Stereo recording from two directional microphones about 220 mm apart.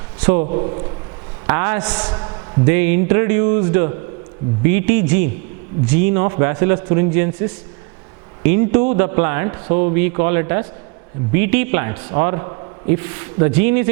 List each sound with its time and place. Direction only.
0.2 s a man's voice: 10° right (ahead or behind)
0.4 s a man's voice: 30° right (ahead or behind)
1.5 s a man's voice: 15° right (ahead or behind)
2.0 s a sound: 25° right (ahead or behind)
2.6 s a man's voice: 10° right (ahead or behind)